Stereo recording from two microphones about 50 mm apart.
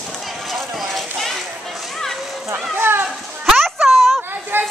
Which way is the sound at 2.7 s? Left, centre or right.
Right.